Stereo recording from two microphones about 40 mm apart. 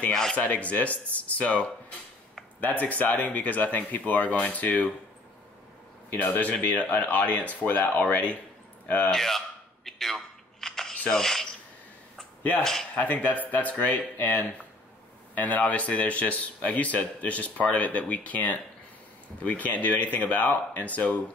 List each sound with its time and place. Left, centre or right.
0.1 s speech: centre
0.4 s a man's voice: left
6.1 s a man's voice: left
9.1 s speech: centre
9.8 s a sound: centre
11.1 s speech: centre
12.9 s a man's voice: left